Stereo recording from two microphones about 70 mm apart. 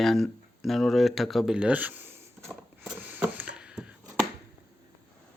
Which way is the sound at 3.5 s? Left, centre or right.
Centre.